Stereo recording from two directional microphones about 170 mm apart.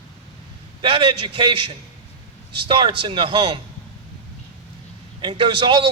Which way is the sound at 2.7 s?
30° right (ahead or behind).